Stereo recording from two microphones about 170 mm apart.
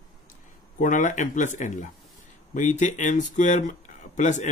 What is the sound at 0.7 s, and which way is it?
Speech, 50° left (ahead or behind).